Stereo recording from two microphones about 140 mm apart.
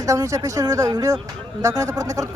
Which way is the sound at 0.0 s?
25° right (ahead or behind).